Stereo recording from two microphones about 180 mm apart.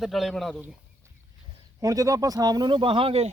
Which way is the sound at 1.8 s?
20° right (ahead or behind).